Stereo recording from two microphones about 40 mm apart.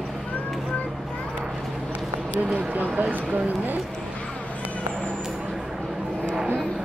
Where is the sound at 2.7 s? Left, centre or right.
Right.